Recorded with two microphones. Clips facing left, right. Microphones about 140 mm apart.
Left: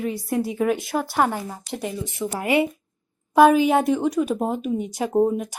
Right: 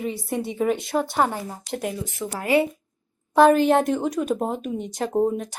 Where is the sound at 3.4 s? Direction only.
5° left (ahead or behind).